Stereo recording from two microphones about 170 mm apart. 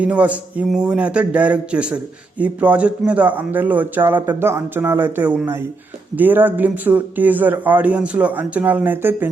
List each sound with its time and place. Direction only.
0.0 s speech: 10° right (ahead or behind)